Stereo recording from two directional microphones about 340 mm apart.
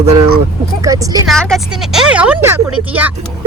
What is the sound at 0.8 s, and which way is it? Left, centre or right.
Speech, centre.